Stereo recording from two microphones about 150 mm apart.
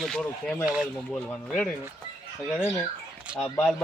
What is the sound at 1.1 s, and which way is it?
Speech, 5° left (ahead or behind).